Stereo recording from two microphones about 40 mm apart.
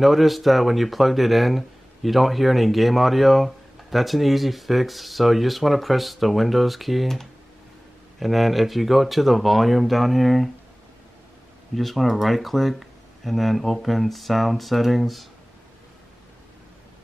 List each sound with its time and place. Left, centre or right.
0.0 s speech: centre
8.2 s speech: centre
11.7 s speech: centre